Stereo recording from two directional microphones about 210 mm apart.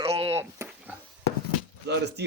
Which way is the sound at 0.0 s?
25° right (ahead or behind).